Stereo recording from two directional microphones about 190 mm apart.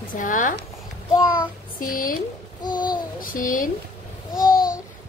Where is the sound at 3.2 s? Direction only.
45° left (ahead or behind).